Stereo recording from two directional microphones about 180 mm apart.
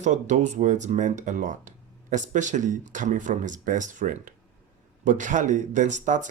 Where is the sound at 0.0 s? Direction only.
40° right (ahead or behind).